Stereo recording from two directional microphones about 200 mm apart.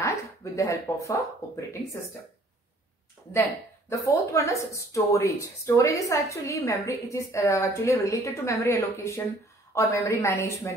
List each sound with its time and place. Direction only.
0.0 s a sound: 15° left (ahead or behind)
1.4 s speech: 15° left (ahead or behind)
3.9 s speech: 15° left (ahead or behind)